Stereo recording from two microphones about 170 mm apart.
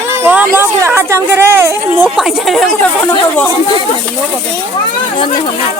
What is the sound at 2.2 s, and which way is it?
Speech, centre (ahead or behind).